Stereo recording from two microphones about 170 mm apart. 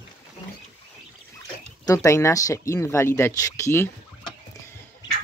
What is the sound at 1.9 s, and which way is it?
Speech, 20° left (ahead or behind).